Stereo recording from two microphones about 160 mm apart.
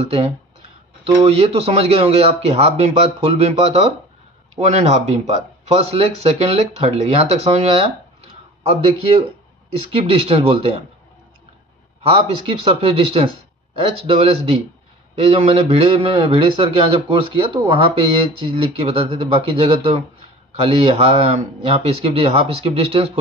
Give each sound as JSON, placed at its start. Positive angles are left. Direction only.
{"t": 0.0, "sound": "speech", "side_deg": -40}
{"t": 12.1, "sound": "speech", "side_deg": -35}